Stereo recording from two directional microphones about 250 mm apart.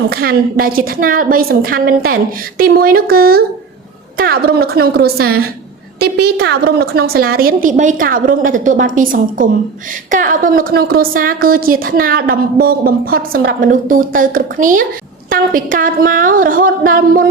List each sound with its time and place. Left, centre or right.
0.1 s a woman's voice: right